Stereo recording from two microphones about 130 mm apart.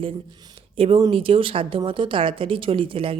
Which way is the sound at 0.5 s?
45° right (ahead or behind).